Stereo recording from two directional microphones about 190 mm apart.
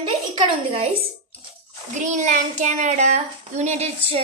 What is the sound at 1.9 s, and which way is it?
A child's voice, 40° right (ahead or behind).